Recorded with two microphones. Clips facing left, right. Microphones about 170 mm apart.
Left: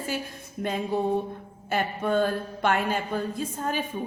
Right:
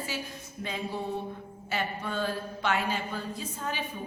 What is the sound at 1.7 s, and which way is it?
A woman's voice, 50° left (ahead or behind).